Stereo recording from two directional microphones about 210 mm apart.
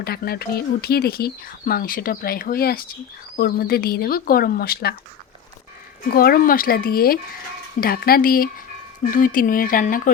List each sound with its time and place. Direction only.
0.0 s speech: 45° left (ahead or behind)
6.1 s speech: 45° left (ahead or behind)